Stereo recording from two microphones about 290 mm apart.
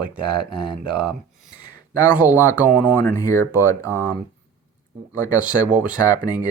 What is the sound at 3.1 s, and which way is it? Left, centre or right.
Speech, centre.